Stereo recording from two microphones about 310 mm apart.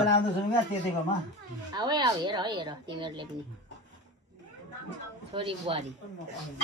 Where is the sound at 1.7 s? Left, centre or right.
Centre.